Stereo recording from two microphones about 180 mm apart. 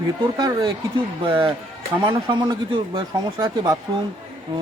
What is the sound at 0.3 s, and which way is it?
Speech, 20° right (ahead or behind).